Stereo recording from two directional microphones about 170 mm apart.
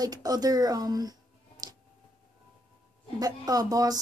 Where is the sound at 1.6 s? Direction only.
25° right (ahead or behind).